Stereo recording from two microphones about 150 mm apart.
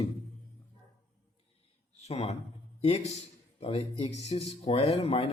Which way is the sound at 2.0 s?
45° left (ahead or behind).